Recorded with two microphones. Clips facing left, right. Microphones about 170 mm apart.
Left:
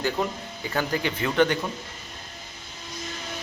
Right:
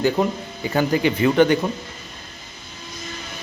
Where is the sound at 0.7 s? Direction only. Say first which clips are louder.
Right 8 dB; 10° right (ahead or behind).